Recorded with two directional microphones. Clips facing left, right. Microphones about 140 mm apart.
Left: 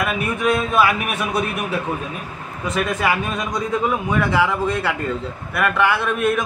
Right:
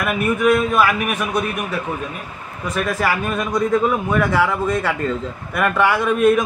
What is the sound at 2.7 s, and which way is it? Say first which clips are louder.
Speech: even; centre (ahead or behind).